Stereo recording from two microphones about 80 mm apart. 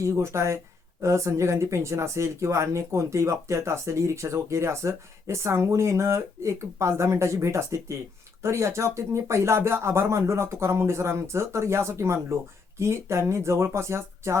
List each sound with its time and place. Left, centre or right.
0.0 s speech: right